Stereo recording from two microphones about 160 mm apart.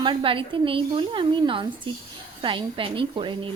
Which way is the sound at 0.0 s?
30° right (ahead or behind).